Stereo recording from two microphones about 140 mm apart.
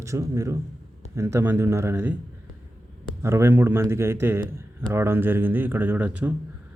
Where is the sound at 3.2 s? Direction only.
20° right (ahead or behind).